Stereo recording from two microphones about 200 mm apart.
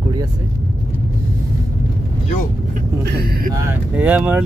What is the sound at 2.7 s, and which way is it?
Speech, 50° right (ahead or behind).